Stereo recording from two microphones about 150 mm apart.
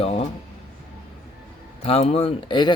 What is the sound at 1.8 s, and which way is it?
Speech, 40° left (ahead or behind).